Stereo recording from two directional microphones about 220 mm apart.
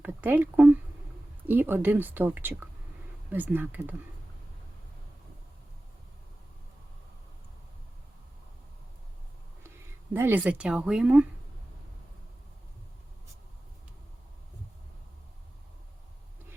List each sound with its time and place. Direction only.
0.0 s speech: 5° right (ahead or behind)
9.6 s speech: 10° right (ahead or behind)